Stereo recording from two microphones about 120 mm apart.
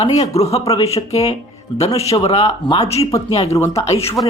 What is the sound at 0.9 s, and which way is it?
Speech, 60° left (ahead or behind).